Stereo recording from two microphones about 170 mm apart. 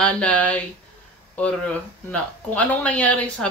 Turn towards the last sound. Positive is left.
turn(degrees=5)  # may be behind; listen again after turning